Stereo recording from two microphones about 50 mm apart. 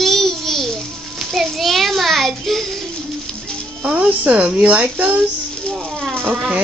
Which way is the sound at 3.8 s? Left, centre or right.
Right.